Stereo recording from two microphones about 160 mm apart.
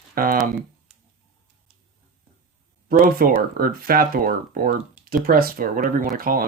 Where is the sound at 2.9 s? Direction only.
65° right (ahead or behind).